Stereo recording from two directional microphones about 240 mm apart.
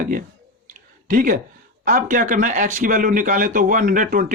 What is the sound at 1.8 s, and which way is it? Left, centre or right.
Speech, right.